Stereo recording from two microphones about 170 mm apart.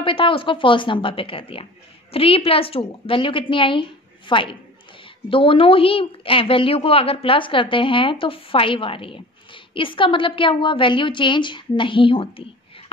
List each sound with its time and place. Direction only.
0.0 s a woman's voice: 30° left (ahead or behind)